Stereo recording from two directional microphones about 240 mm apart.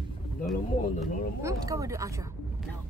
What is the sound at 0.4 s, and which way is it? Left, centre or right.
Speech, centre.